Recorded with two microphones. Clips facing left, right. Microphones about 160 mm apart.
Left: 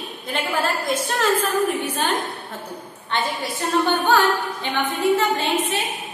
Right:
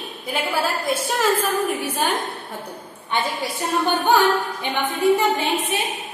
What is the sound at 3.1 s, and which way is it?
Speech, 10° right (ahead or behind).